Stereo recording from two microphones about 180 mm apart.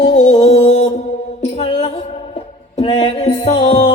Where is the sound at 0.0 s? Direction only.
35° left (ahead or behind).